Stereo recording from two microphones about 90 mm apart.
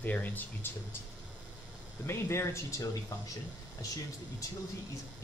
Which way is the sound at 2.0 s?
30° left (ahead or behind).